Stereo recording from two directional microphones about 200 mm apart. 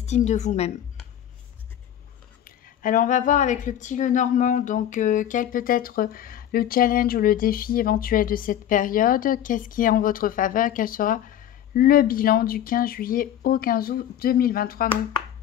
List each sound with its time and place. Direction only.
0.0 s a woman's voice: 35° left (ahead or behind)
2.4 s speech: 45° left (ahead or behind)